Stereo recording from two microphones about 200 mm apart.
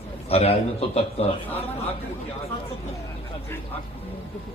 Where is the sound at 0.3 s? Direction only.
30° left (ahead or behind).